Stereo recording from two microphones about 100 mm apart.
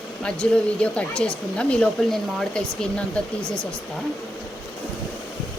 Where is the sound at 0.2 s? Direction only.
10° left (ahead or behind).